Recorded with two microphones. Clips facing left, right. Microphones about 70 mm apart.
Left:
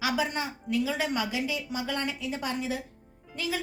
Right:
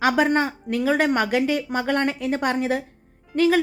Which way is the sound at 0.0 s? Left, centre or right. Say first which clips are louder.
Right 10 dB; right.